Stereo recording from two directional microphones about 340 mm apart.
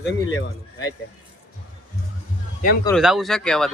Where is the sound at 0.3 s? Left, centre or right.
Left.